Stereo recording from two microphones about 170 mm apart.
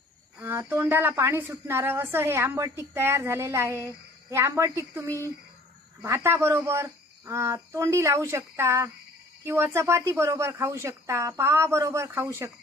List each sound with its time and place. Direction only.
0.4 s a woman's voice: 10° right (ahead or behind)